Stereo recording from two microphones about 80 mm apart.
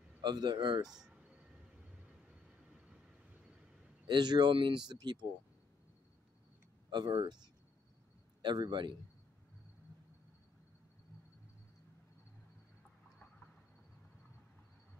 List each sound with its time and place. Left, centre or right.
0.2 s speech: right
0.8 s a sound: centre
4.1 s speech: right
6.9 s speech: right
8.4 s speech: right